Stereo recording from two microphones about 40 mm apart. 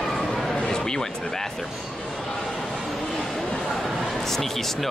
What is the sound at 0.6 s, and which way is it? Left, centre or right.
Music, centre.